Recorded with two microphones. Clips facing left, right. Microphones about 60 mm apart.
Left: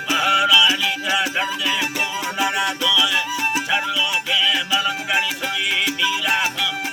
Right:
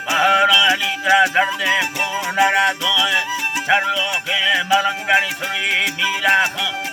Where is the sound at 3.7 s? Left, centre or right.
Right.